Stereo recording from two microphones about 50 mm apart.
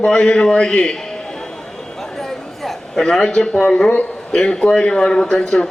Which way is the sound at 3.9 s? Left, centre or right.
Left.